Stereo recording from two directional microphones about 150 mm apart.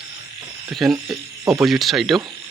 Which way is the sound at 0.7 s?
Centre (ahead or behind).